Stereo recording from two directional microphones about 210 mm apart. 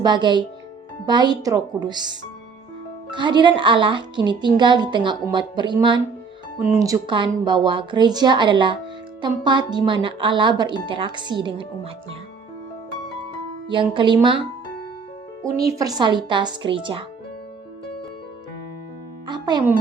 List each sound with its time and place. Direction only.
0.0 s speech: 20° right (ahead or behind)
13.7 s speech: 25° right (ahead or behind)
15.5 s speech: 15° right (ahead or behind)
19.3 s speech: 20° right (ahead or behind)